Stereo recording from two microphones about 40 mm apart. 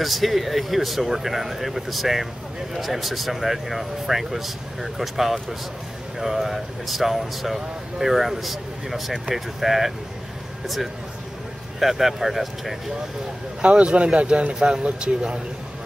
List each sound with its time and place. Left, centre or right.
0.0 s speech: centre
11.8 s speech: centre
13.6 s speech: right